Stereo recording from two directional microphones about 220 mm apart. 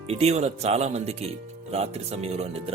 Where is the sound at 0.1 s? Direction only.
30° right (ahead or behind).